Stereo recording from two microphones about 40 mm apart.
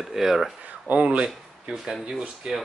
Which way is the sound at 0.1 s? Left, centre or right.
Centre.